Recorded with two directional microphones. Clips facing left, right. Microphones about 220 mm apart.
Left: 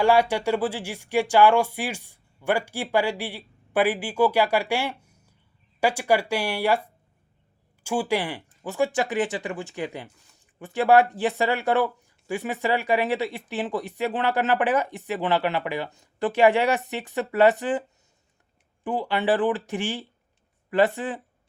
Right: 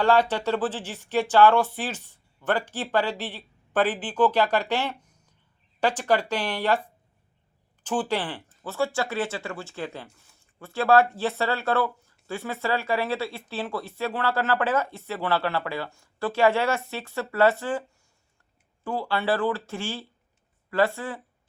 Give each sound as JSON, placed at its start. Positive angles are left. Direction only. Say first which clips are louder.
{"t": 0.0, "sound": "speech", "louder": "left 1 dB", "side_deg": 10}
{"t": 7.9, "sound": "speech", "louder": "left 2 dB", "side_deg": 10}